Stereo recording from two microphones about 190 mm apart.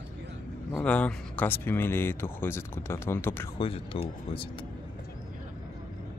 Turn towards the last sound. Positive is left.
turn(degrees=30)  # may be behind; listen again after turning